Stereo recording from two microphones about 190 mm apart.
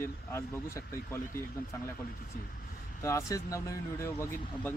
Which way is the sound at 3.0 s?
15° left (ahead or behind).